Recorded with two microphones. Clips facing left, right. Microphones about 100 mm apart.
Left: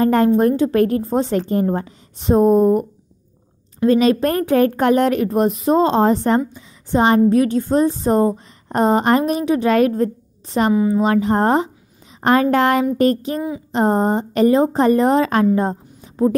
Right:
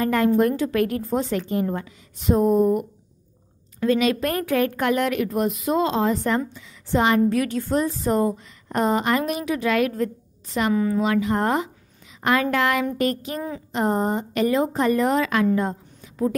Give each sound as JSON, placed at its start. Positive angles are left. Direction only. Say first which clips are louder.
{"t": 0.0, "sound": "a woman's voice", "louder": "left 5 dB", "side_deg": 30}
{"t": 6.5, "sound": "a woman's voice", "louder": "left 4 dB", "side_deg": 20}
{"t": 10.7, "sound": "a woman's voice", "louder": "left 4 dB", "side_deg": 15}
{"t": 11.0, "sound": "a woman's voice", "louder": "left 5 dB", "side_deg": 35}
{"t": 15.5, "sound": "a sound", "louder": "left 4 dB", "side_deg": 30}